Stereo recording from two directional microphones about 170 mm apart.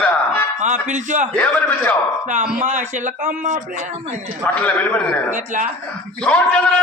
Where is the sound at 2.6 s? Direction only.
45° right (ahead or behind).